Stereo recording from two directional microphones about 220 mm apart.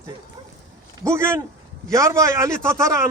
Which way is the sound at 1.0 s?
10° right (ahead or behind).